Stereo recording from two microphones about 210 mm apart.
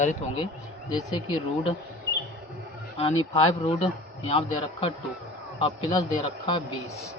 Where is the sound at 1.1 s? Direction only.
25° left (ahead or behind).